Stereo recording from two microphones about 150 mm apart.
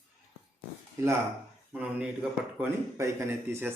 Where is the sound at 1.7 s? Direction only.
10° right (ahead or behind).